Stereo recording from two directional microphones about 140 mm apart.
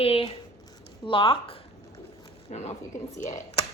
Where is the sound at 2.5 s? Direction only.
50° left (ahead or behind).